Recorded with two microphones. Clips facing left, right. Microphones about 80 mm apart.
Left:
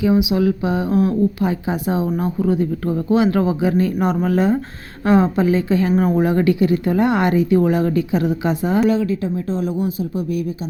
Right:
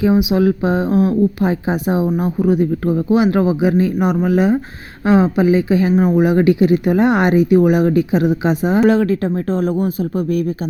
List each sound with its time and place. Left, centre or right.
0.0 s speech: right
8.9 s speech: right